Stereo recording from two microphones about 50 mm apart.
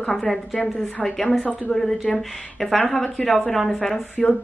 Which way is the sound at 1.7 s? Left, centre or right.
Centre.